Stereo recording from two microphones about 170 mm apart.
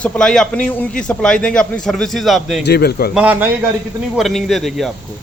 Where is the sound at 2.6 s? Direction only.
70° left (ahead or behind).